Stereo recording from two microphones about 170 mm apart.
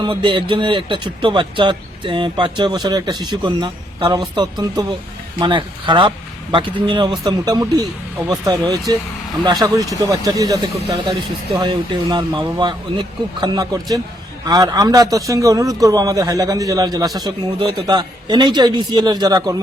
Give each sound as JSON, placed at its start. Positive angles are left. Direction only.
{"t": 0.0, "sound": "speech", "side_deg": -25}